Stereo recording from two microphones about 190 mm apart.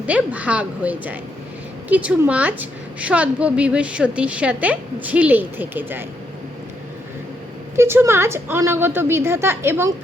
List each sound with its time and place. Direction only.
0.0 s a woman's voice: 5° right (ahead or behind)
7.8 s a woman's voice: 15° right (ahead or behind)